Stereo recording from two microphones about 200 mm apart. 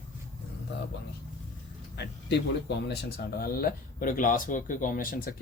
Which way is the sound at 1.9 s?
55° left (ahead or behind).